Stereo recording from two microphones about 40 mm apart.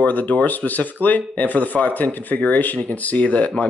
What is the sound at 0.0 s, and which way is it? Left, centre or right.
Speech, left.